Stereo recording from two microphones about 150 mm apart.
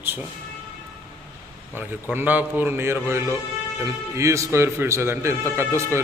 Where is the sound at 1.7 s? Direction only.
10° right (ahead or behind).